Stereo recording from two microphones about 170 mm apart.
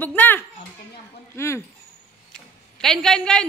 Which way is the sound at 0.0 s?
10° left (ahead or behind).